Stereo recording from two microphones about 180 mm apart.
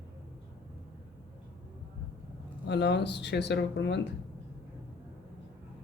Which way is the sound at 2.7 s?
70° left (ahead or behind).